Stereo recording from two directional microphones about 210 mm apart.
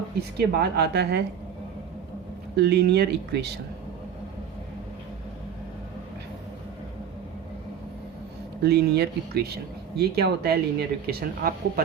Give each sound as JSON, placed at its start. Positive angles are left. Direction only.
{"t": 0.3, "sound": "speech", "side_deg": -50}
{"t": 2.6, "sound": "speech", "side_deg": -50}
{"t": 8.6, "sound": "speech", "side_deg": -50}